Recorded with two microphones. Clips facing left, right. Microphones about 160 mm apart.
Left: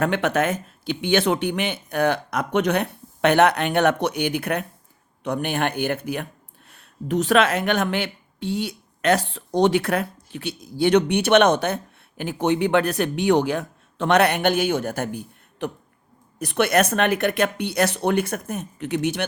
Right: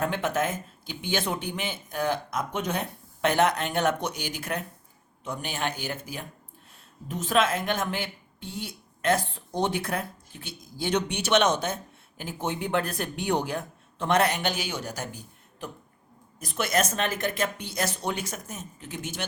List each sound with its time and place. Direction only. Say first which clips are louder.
0.0 s speech: left 6 dB; 75° left (ahead or behind)